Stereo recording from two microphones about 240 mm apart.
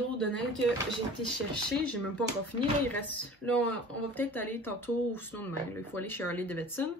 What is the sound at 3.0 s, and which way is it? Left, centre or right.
Speech, centre.